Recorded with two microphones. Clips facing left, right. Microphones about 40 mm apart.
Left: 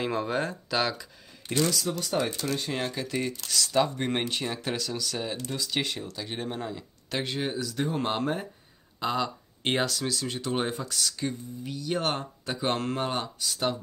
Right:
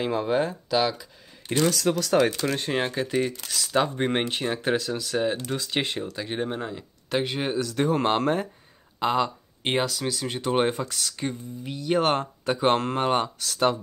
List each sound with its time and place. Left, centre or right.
0.0 s speech: centre
1.5 s speech: right
1.9 s speech: right
2.4 s speech: right
4.0 s speech: right
5.5 s speech: right
6.2 s speech: centre
7.5 s speech: right
7.9 s speech: right
9.0 s speech: right
9.6 s speech: centre
10.3 s speech: right
13.4 s speech: right